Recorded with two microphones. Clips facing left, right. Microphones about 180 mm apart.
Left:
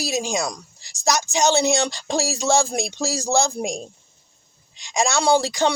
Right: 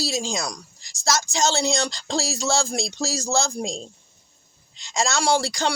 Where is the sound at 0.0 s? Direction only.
15° left (ahead or behind).